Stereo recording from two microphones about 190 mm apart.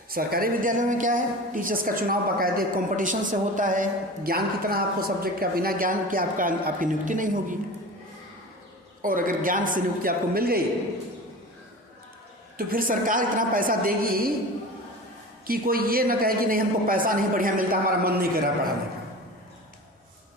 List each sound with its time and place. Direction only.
0.1 s a woman's voice: 50° right (ahead or behind)
9.0 s a woman's voice: 45° right (ahead or behind)
12.5 s a woman's voice: 50° right (ahead or behind)
15.4 s a woman's voice: 50° right (ahead or behind)